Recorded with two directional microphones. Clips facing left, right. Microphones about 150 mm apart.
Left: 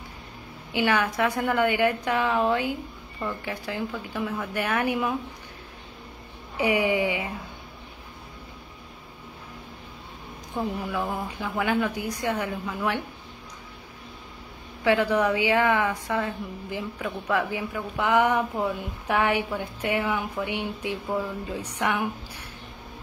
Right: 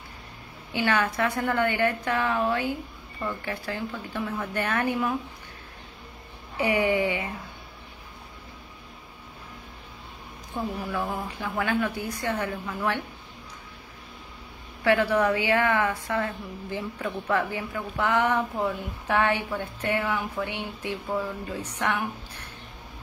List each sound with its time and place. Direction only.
0.7 s a woman's voice: 10° left (ahead or behind)
6.5 s a woman's voice: 15° left (ahead or behind)
10.9 s a woman's voice: 15° left (ahead or behind)
14.8 s a woman's voice: 15° left (ahead or behind)